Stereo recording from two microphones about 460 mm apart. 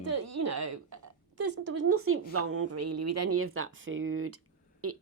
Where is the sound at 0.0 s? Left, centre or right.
Right.